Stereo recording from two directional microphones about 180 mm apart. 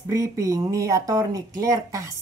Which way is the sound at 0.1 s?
20° right (ahead or behind).